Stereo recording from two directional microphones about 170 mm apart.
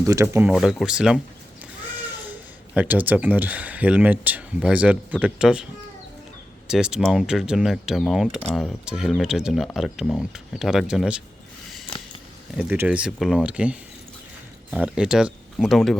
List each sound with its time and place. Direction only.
0.0 s speech: 20° right (ahead or behind)
0.4 s speech: centre (ahead or behind)
2.7 s speech: 10° right (ahead or behind)
6.7 s speech: 5° right (ahead or behind)
12.5 s speech: 10° right (ahead or behind)